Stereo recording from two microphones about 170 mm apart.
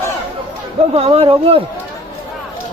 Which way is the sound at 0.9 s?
35° right (ahead or behind).